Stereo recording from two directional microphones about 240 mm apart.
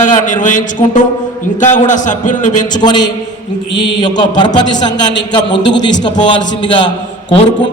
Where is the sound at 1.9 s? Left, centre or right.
Left.